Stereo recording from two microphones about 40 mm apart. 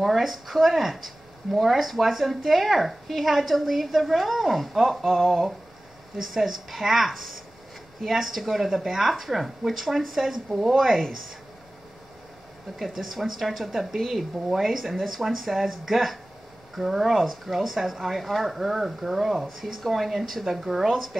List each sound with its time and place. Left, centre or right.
0.0 s speech: centre
6.3 s speech: centre
10.5 s speech: centre
10.8 s speech: centre
12.7 s speech: centre
15.0 s speech: centre